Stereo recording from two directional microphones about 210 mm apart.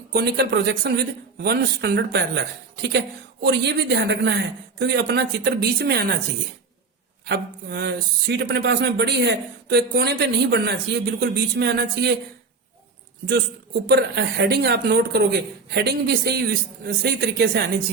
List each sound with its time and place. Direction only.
0.1 s speech: 50° right (ahead or behind)
3.4 s speech: 55° right (ahead or behind)
7.3 s speech: 50° right (ahead or behind)
13.8 s speech: 50° right (ahead or behind)